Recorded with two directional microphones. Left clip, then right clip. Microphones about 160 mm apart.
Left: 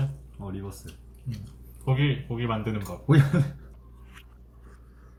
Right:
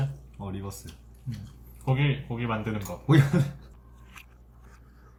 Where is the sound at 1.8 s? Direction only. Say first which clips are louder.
Left 1 dB; 20° left (ahead or behind).